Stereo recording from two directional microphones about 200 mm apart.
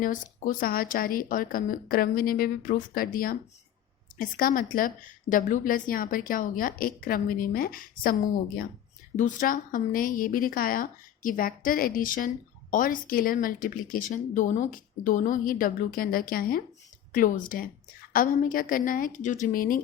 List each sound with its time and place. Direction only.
0.0 s a woman's voice: 45° left (ahead or behind)
9.1 s a woman's voice: 40° left (ahead or behind)